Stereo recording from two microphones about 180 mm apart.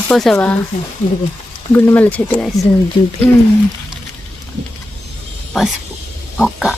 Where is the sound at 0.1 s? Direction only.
5° left (ahead or behind).